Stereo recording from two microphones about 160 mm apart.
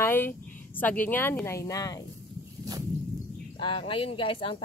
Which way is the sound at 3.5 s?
35° left (ahead or behind).